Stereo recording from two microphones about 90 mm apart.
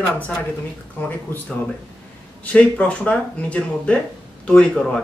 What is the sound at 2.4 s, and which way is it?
Speech, 15° left (ahead or behind).